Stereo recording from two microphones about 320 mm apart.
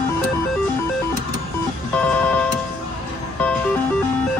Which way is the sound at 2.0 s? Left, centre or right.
Centre.